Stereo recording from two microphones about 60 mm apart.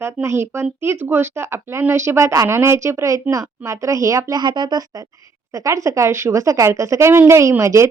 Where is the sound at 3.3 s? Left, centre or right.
Right.